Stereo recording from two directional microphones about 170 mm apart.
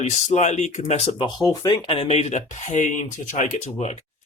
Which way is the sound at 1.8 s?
35° left (ahead or behind).